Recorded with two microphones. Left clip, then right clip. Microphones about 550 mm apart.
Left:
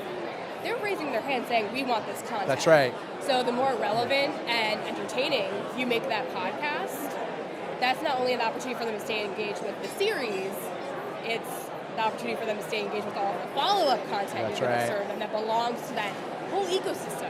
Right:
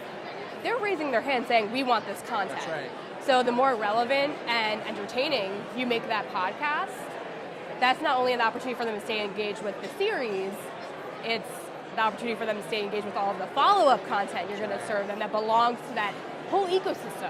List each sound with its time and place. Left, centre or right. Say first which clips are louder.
0.6 s a woman's voice: right 3 dB; right
2.7 s speech: left 14 dB; left
3.2 s a woman's voice: right 3 dB; right
11.9 s a woman's voice: right 2 dB; right